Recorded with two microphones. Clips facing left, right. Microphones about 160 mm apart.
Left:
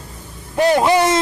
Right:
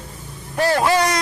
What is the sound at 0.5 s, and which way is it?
Speech, 20° left (ahead or behind).